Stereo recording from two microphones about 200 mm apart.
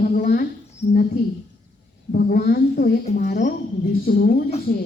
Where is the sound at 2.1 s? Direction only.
45° left (ahead or behind).